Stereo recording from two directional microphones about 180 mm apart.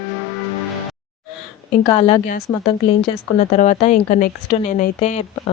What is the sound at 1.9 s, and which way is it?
Speech, 30° left (ahead or behind).